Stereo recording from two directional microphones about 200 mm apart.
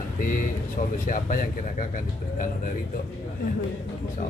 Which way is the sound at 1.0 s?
45° left (ahead or behind).